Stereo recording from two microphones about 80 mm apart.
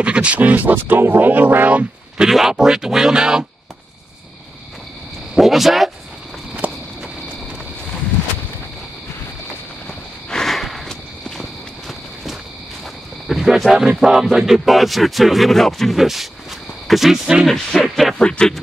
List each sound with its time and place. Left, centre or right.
0.0 s speech: centre
2.2 s speech: centre
5.3 s speech: centre
6.6 s walk: centre
9.8 s walk: centre
13.3 s speech: centre
18.2 s speech: centre